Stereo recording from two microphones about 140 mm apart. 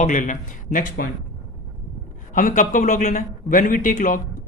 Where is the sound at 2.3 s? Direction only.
70° left (ahead or behind).